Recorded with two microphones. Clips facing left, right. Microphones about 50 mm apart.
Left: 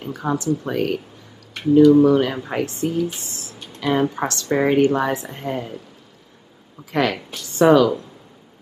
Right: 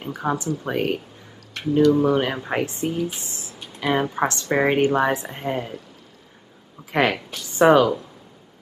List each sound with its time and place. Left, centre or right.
0.1 s speech: right
1.8 s speech: centre
2.0 s speech: right
3.3 s a sound: right
3.5 s a sound: centre
4.1 s speech: right
6.9 s speech: right
7.2 s speech: centre
7.4 s speech: right